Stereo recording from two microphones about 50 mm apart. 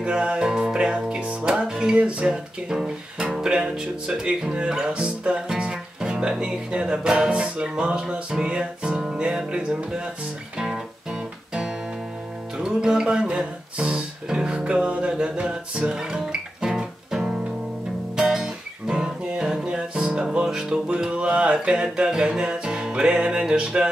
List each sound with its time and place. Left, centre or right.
0.0 s music: right
2.0 s speech: right
12.5 s music: centre